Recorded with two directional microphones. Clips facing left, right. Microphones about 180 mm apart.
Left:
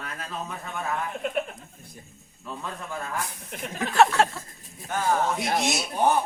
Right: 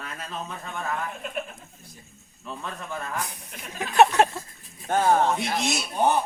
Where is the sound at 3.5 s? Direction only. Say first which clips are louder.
Left 6 dB; 50° left (ahead or behind).